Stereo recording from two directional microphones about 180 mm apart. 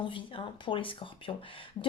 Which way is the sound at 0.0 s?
30° left (ahead or behind).